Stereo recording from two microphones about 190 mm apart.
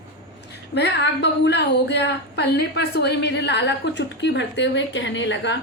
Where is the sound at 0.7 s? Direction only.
65° left (ahead or behind).